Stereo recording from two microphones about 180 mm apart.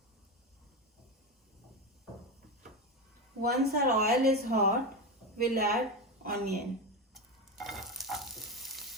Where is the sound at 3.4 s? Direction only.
60° right (ahead or behind).